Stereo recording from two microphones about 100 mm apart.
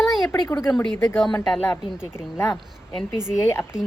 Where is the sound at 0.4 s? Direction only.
35° left (ahead or behind).